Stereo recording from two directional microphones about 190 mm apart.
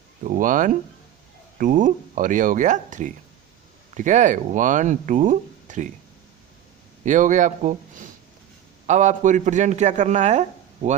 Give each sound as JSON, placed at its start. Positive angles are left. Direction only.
{"t": 0.3, "sound": "speech", "side_deg": -45}
{"t": 7.0, "sound": "a man's voice", "side_deg": -40}